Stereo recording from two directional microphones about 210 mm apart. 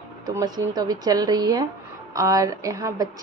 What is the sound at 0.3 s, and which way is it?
A woman's voice, 15° right (ahead or behind).